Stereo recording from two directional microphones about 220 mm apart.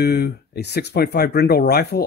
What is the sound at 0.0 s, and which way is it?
Speech, 45° left (ahead or behind).